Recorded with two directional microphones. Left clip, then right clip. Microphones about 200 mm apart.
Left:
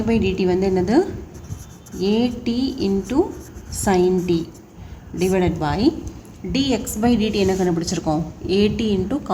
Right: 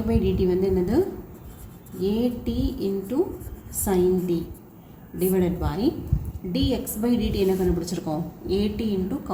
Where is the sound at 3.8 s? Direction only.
50° left (ahead or behind).